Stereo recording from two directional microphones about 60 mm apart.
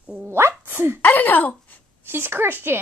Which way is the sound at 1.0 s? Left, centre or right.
Left.